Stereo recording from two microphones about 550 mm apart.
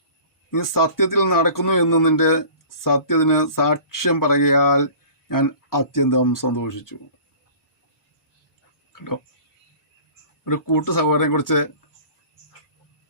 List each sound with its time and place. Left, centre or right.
0.5 s speech: left
8.9 s a sound: left
10.4 s speech: left